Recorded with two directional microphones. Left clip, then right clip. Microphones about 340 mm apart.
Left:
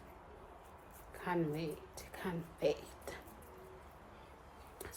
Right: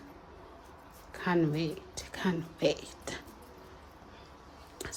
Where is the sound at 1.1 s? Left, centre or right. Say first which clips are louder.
Right 8 dB; right.